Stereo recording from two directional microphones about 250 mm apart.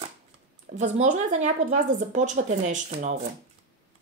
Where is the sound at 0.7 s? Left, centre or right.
Right.